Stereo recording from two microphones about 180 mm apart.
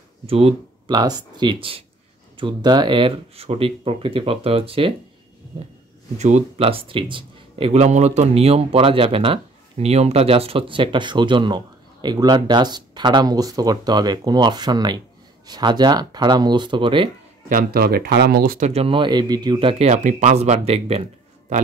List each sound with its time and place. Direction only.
0.3 s speech: 35° right (ahead or behind)
0.9 s speech: 20° right (ahead or behind)
6.1 s speech: 40° right (ahead or behind)
17.5 s speech: 55° right (ahead or behind)
18.6 s speech: 35° right (ahead or behind)